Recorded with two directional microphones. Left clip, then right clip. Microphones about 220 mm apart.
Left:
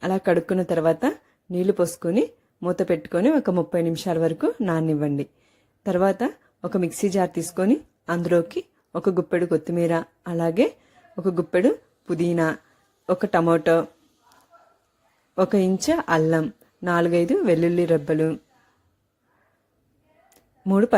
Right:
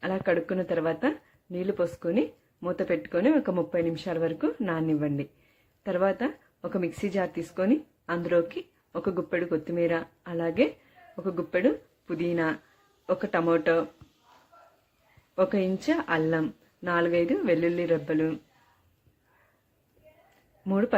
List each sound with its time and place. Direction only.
0.0 s speech: 45° left (ahead or behind)
15.4 s speech: 45° left (ahead or behind)
20.7 s speech: 45° left (ahead or behind)